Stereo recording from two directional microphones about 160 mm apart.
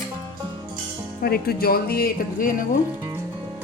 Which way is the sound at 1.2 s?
70° left (ahead or behind).